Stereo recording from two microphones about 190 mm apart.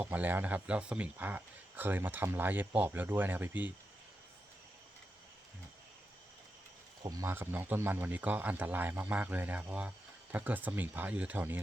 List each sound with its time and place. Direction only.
0.0 s speech: 10° right (ahead or behind)
7.0 s speech: 15° right (ahead or behind)